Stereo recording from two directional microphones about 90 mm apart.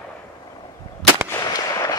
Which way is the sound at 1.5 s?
45° left (ahead or behind).